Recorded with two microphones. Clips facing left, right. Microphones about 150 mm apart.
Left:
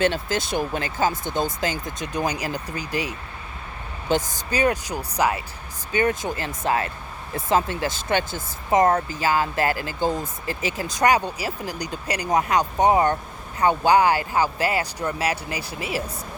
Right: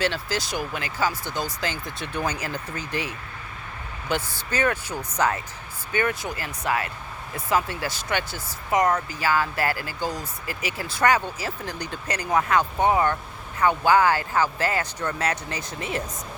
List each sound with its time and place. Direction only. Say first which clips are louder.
0.0 s speech: left 4 dB; 20° left (ahead or behind)
5.9 s speech: left 3 dB; 20° left (ahead or behind)